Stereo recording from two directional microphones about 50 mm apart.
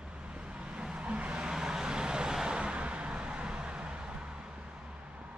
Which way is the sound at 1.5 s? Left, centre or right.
Centre.